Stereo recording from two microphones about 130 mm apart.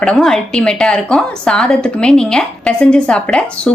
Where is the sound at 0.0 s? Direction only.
5° left (ahead or behind).